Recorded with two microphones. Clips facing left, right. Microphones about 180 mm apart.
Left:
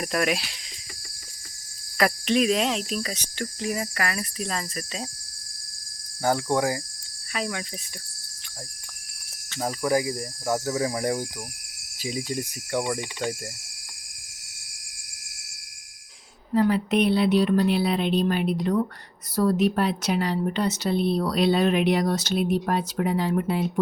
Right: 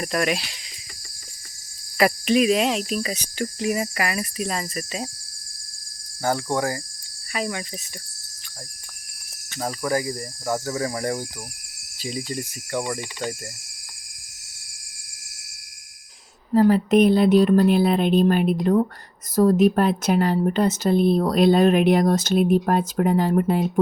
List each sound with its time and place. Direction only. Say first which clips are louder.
0.0 s speech: right 1 dB; centre (ahead or behind)
2.0 s cricket: right 3 dB; 5° right (ahead or behind)
6.2 s speech: even; 10° left (ahead or behind)
7.3 s speech: right 2 dB; 5° right (ahead or behind)
9.6 s speech: left 1 dB; 10° left (ahead or behind)
16.6 s speech: right 5 dB; 45° right (ahead or behind)